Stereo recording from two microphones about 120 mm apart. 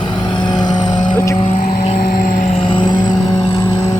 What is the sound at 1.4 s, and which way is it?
Vehicle, 90° left.